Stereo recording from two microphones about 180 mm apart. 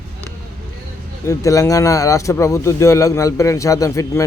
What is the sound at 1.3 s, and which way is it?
Speech, 20° left (ahead or behind).